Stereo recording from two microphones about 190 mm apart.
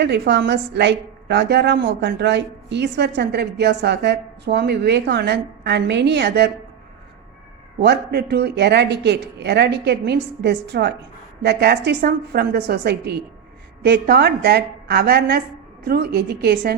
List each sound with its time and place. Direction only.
0.0 s a woman's voice: 65° right (ahead or behind)
7.8 s a woman's voice: 60° right (ahead or behind)